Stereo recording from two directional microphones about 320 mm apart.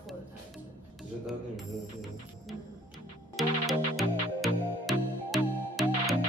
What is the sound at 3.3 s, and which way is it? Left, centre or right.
Music, centre.